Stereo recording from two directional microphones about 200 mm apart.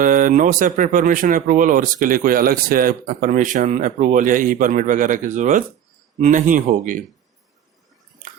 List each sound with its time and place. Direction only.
0.0 s speech: 45° right (ahead or behind)